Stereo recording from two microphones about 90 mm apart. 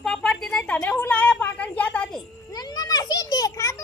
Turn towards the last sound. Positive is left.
turn(degrees=35)  # may be behind; listen again after turning